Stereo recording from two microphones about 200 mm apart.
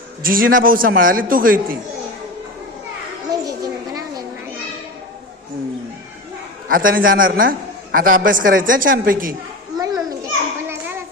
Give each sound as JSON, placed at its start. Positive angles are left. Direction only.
{"t": 0.2, "sound": "a man's voice", "side_deg": -45}
{"t": 3.4, "sound": "a sound", "side_deg": -20}
{"t": 6.7, "sound": "a man's voice", "side_deg": -45}
{"t": 9.7, "sound": "children playing", "side_deg": -20}